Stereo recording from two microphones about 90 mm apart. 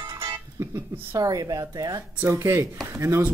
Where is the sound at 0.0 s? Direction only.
35° right (ahead or behind).